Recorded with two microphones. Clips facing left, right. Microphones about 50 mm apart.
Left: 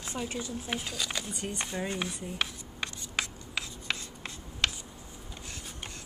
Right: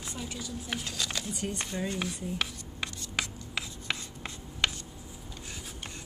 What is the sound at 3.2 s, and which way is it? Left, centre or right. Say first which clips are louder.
Writing: even; centre.